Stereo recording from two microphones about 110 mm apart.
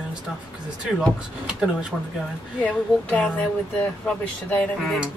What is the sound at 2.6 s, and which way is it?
Speech, 10° left (ahead or behind).